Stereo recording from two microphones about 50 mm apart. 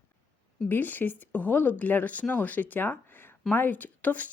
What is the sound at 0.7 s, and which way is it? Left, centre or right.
Speech, left.